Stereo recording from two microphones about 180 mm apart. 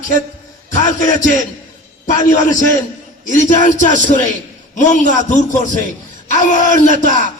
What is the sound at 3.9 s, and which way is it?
Speech, 45° right (ahead or behind).